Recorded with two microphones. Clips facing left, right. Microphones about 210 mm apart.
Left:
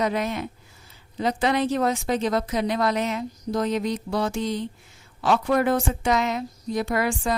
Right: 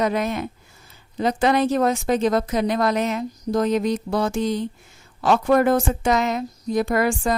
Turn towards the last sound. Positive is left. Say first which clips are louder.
# right 4 dB
turn(degrees=-45)  # may be behind; listen again after turning